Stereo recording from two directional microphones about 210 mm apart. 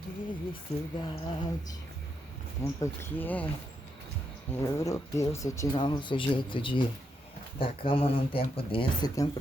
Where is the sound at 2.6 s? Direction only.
10° left (ahead or behind).